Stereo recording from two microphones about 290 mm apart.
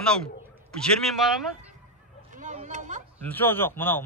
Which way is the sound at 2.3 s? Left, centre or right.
Right.